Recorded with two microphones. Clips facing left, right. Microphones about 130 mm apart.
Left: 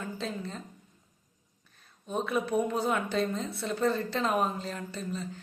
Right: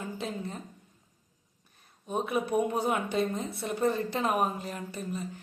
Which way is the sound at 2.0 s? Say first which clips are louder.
Even; 15° right (ahead or behind).